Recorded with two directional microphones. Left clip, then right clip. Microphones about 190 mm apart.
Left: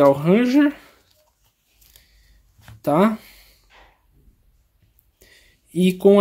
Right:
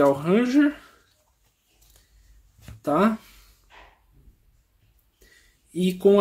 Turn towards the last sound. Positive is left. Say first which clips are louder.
# left 4 dB
turn(degrees=45)  # may be behind; listen again after turning